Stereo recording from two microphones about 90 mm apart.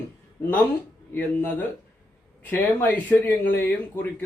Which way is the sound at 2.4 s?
20° left (ahead or behind).